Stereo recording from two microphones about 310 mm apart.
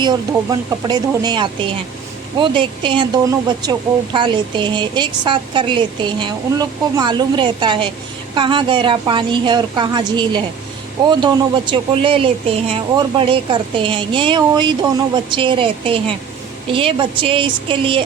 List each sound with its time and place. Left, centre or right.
0.0 s speech: centre